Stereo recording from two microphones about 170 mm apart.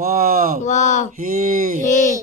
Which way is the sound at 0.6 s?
45° left (ahead or behind).